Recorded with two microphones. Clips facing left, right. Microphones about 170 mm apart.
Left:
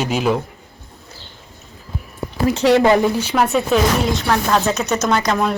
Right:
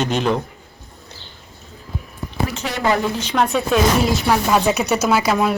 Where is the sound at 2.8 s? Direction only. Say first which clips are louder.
Left 5 dB; 10° left (ahead or behind).